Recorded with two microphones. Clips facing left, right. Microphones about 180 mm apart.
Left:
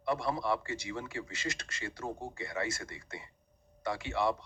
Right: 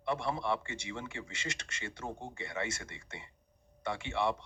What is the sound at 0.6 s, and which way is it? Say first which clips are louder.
Speech: left 3 dB; 25° right (ahead or behind).